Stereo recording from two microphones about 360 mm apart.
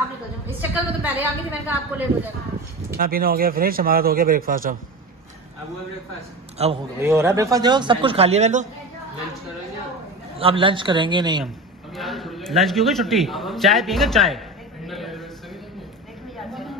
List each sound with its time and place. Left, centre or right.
0.5 s a woman's voice: centre
3.0 s a man's voice: right
6.6 s speech: centre
10.4 s speech: centre
11.4 s a man's voice: centre
14.9 s a sound: centre